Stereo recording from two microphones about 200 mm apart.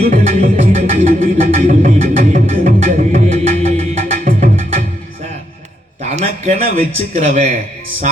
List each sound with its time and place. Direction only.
0.1 s a man's voice: 40° right (ahead or behind)
1.5 s music: 35° right (ahead or behind)
6.0 s a man's voice: 35° right (ahead or behind)